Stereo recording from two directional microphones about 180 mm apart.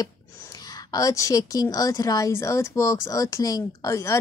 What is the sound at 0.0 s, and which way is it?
Speech, 20° left (ahead or behind).